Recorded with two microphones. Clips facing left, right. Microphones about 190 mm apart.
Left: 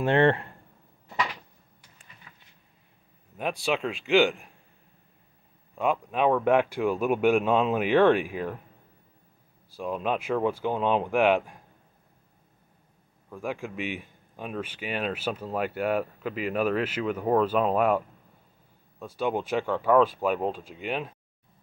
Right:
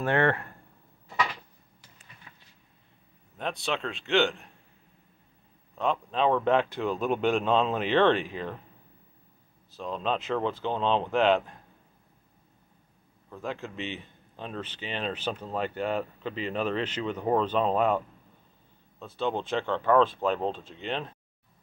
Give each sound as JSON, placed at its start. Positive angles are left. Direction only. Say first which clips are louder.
{"t": 0.0, "sound": "speech", "louder": "left 4 dB", "side_deg": 25}
{"t": 3.3, "sound": "speech", "louder": "left 3 dB", "side_deg": 10}
{"t": 5.8, "sound": "speech", "louder": "left 2 dB", "side_deg": 10}
{"t": 9.7, "sound": "speech", "louder": "left 2 dB", "side_deg": 10}
{"t": 13.3, "sound": "speech", "louder": "left 2 dB", "side_deg": 10}